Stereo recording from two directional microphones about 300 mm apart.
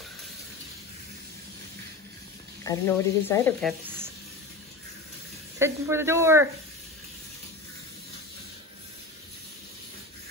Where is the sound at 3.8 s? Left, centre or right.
Centre.